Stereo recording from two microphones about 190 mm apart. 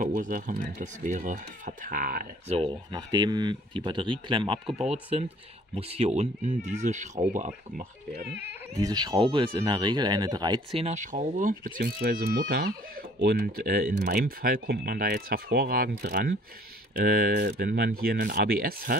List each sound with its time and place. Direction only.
0.0 s speech: 45° right (ahead or behind)
2.4 s speech: 35° right (ahead or behind)
2.9 s speech: 20° right (ahead or behind); by 8.4 s 45° right (ahead or behind)
8.5 s speech: 20° right (ahead or behind); by 18.9 s 50° right (ahead or behind)